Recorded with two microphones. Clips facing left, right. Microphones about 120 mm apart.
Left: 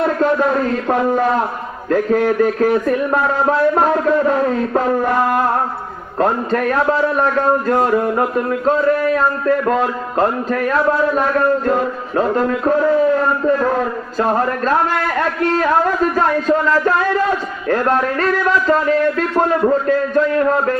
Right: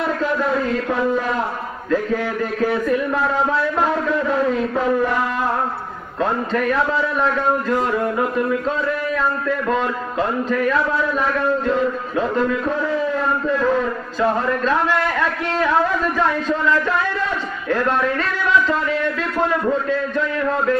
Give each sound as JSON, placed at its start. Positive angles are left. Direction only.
{"t": 0.2, "sound": "a man's voice", "side_deg": 50}
{"t": 19.9, "sound": "a man's voice", "side_deg": 45}